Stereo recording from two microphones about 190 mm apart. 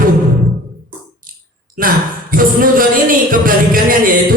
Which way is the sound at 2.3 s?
45° right (ahead or behind).